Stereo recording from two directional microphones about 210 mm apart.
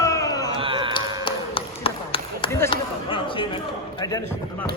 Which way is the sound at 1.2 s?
25° left (ahead or behind).